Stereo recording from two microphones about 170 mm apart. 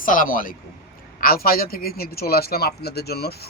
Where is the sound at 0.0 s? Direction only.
55° left (ahead or behind).